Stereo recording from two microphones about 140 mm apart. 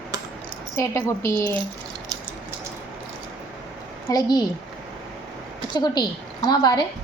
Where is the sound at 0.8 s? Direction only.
20° left (ahead or behind).